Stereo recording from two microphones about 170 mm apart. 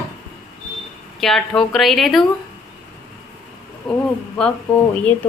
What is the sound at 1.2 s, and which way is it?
A woman's voice, centre (ahead or behind).